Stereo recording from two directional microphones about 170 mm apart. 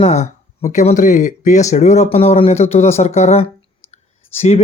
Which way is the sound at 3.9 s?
40° left (ahead or behind).